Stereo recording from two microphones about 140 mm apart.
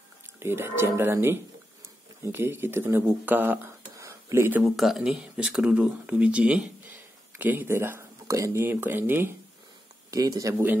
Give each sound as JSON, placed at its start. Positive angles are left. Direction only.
{"t": 0.4, "sound": "speech", "side_deg": -15}
{"t": 4.6, "sound": "speech", "side_deg": 0}
{"t": 10.1, "sound": "speech", "side_deg": -25}